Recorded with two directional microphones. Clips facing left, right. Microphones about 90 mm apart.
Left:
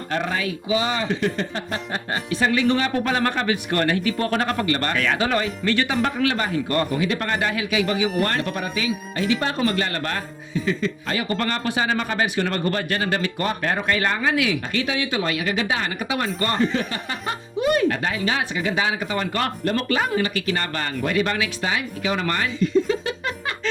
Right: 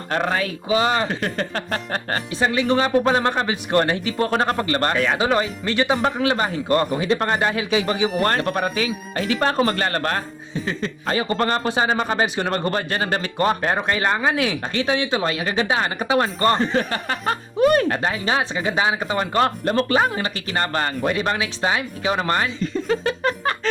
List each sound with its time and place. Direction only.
0.1 s speech: 45° right (ahead or behind)
2.4 s a man's voice: 25° right (ahead or behind); by 23.6 s 45° right (ahead or behind)